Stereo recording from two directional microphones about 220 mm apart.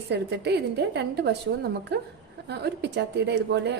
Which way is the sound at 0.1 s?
50° right (ahead or behind).